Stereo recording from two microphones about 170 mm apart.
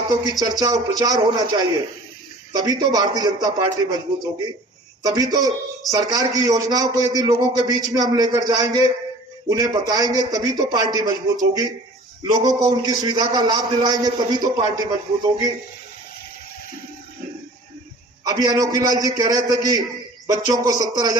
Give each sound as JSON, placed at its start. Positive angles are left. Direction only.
{"t": 0.1, "sound": "a man's voice", "side_deg": -25}
{"t": 18.3, "sound": "a man's voice", "side_deg": -20}